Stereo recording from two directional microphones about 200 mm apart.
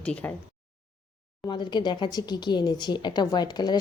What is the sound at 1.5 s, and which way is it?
Speech, 20° left (ahead or behind).